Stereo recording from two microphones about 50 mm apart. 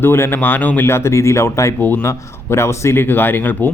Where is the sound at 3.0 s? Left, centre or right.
Left.